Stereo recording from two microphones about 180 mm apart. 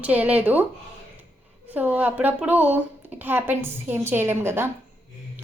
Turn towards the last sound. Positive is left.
turn(degrees=-15)  # may be behind; listen again after turning